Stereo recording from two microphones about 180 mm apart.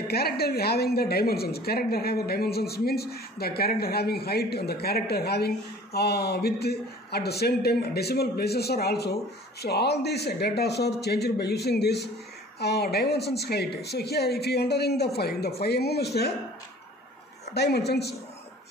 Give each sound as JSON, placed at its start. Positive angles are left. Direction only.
{"t": 0.1, "sound": "a man's voice", "side_deg": 60}
{"t": 17.6, "sound": "a man's voice", "side_deg": 65}